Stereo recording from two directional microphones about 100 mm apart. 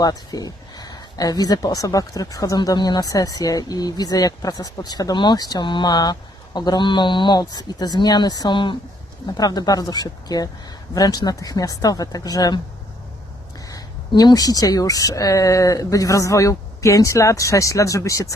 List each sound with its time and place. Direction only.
0.0 s speech: 40° left (ahead or behind)
9.2 s speech: 40° left (ahead or behind)
14.2 s speech: 40° left (ahead or behind)